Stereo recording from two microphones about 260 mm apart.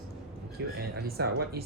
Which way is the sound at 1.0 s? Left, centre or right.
Right.